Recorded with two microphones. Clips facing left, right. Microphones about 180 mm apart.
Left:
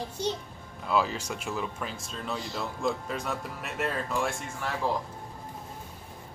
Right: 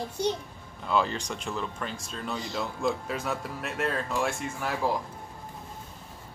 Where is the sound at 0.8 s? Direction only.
5° left (ahead or behind).